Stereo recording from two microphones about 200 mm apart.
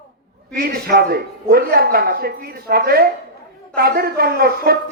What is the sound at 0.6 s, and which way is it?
Speech, 50° right (ahead or behind).